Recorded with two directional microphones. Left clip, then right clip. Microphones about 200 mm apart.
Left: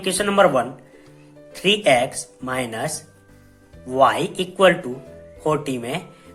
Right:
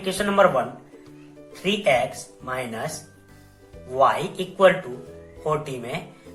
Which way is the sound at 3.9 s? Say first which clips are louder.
Left 3 dB; 50° left (ahead or behind).